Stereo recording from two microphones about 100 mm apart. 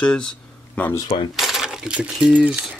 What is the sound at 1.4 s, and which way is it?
Coin, 5° right (ahead or behind).